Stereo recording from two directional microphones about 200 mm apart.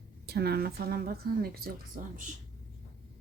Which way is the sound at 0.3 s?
50° right (ahead or behind).